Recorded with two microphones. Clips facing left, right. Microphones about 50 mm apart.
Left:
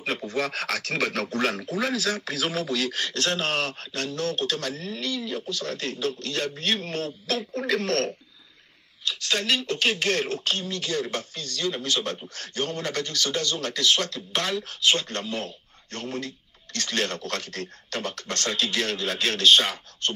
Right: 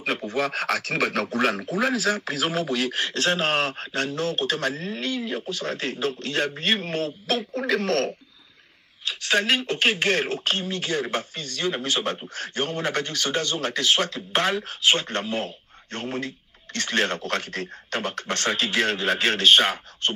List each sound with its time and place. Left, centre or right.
0.0 s speech: right